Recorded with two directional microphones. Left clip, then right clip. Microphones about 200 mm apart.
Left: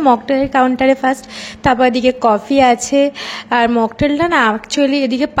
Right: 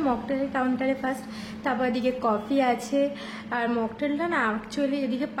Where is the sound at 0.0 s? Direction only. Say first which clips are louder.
Left 14 dB; 40° left (ahead or behind).